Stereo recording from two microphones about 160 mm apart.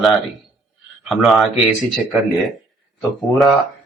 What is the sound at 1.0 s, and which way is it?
Speech, centre (ahead or behind).